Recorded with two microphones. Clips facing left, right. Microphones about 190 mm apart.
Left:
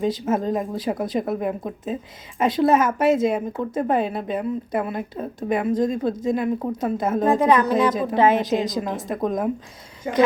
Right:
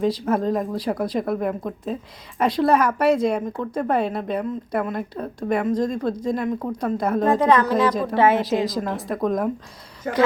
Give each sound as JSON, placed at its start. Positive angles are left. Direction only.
{"t": 0.0, "sound": "a woman's voice", "side_deg": 0}
{"t": 7.3, "sound": "a woman's voice", "side_deg": 20}
{"t": 9.0, "sound": "a woman's voice", "side_deg": 0}
{"t": 10.0, "sound": "a woman's voice", "side_deg": 15}